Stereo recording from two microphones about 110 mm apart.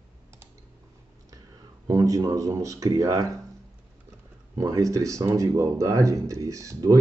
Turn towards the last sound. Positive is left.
turn(degrees=-30)  # may be behind; listen again after turning